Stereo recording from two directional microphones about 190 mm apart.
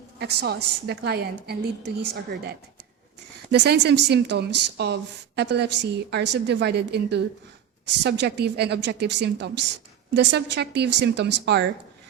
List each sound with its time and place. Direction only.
0.2 s a woman's voice: 60° right (ahead or behind)